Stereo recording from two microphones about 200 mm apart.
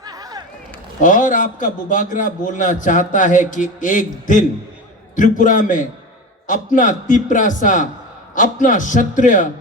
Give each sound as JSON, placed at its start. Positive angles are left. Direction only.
{"t": 0.0, "sound": "run", "side_deg": -20}
{"t": 1.0, "sound": "a man's voice", "side_deg": 40}